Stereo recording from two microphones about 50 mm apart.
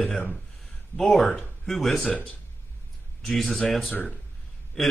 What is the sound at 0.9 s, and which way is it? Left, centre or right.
Speech, centre.